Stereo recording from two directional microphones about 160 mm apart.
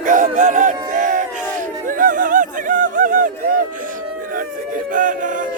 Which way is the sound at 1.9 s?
55° right (ahead or behind).